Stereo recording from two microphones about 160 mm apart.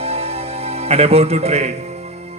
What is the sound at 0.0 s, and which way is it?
Music, 40° right (ahead or behind).